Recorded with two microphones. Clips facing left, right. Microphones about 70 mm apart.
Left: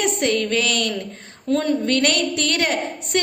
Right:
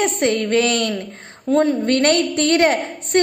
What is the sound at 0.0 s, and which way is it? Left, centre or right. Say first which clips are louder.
A woman's voice: right 2 dB; right.